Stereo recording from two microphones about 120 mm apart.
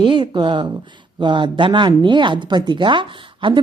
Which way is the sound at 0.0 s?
40° right (ahead or behind).